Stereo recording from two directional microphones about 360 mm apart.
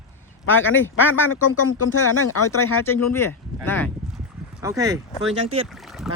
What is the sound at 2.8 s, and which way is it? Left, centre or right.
Speech, centre.